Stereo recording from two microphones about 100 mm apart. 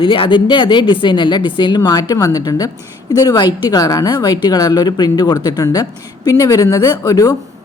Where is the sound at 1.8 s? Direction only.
40° left (ahead or behind).